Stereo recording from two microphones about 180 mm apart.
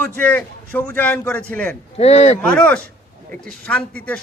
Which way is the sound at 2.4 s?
5° left (ahead or behind).